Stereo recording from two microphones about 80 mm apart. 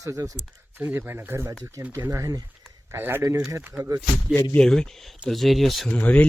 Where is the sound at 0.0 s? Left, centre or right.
Right.